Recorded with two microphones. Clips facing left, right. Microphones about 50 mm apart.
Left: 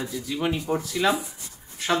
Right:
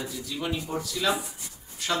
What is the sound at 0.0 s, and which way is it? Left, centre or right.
Speech, left.